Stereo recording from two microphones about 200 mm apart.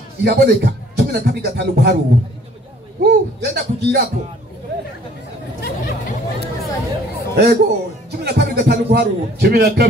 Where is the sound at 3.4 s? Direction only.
50° right (ahead or behind).